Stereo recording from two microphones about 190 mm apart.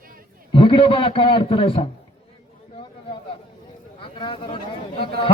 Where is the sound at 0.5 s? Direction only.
30° left (ahead or behind).